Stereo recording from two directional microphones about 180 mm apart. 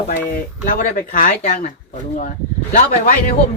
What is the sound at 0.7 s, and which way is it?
Speech, 50° left (ahead or behind).